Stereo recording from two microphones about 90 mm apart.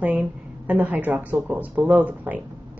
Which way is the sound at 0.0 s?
15° right (ahead or behind).